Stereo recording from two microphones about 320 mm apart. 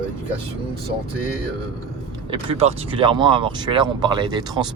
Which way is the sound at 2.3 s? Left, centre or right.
Centre.